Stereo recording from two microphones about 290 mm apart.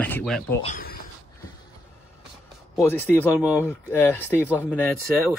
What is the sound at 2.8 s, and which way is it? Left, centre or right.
Speech, centre.